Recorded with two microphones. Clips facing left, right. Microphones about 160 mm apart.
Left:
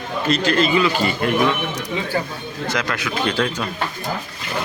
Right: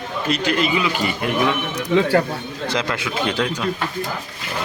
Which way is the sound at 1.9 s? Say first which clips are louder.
Right 9 dB; 70° right (ahead or behind).